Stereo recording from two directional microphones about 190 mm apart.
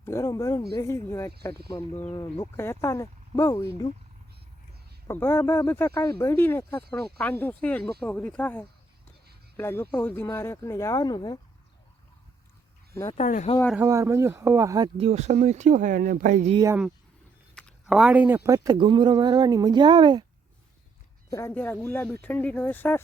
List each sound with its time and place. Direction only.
0.0 s speech: 15° left (ahead or behind)
5.0 s speech: 10° left (ahead or behind)
13.1 s speech: 40° left (ahead or behind)
13.7 s speech: 15° right (ahead or behind)
14.9 s speech: 35° right (ahead or behind)
16.5 s speech: 20° right (ahead or behind)
17.5 s speech: 5° left (ahead or behind); by 20.2 s 25° right (ahead or behind)
21.2 s speech: 15° left (ahead or behind)